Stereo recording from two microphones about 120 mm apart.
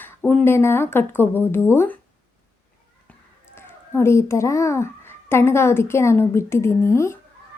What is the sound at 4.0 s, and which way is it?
A woman's voice, 20° left (ahead or behind).